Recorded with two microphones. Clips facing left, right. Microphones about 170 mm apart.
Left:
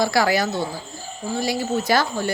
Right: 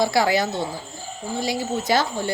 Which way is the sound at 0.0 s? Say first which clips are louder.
Even; 20° right (ahead or behind).